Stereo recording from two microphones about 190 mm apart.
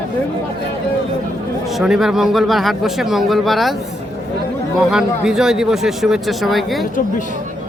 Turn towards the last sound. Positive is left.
turn(degrees=0)  # may be behind; listen again after turning